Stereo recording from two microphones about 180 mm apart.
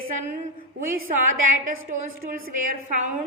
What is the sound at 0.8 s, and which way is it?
A woman's voice, 50° right (ahead or behind).